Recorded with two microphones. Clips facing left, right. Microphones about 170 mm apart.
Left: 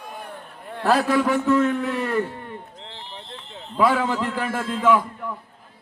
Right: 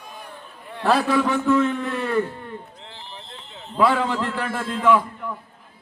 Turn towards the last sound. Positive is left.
turn(degrees=10)  # may be behind; listen again after turning